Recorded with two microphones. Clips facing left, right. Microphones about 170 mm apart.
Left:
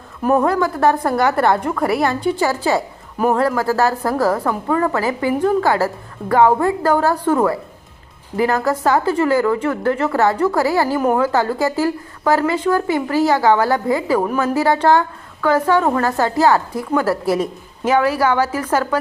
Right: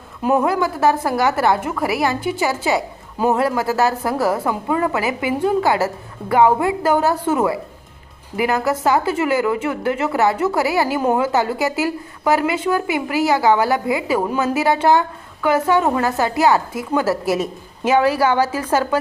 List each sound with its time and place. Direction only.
0.2 s a woman's voice: 10° right (ahead or behind)
2.4 s a woman's voice: 20° right (ahead or behind)
6.3 s a woman's voice: 10° right (ahead or behind)
7.0 s a woman's voice: 20° right (ahead or behind)
8.4 s a woman's voice: 10° right (ahead or behind)
10.3 s a woman's voice: 20° right (ahead or behind)
14.3 s a woman's voice: 20° right (ahead or behind)